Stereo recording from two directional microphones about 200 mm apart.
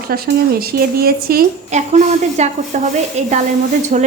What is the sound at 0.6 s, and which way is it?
Speech, 50° right (ahead or behind).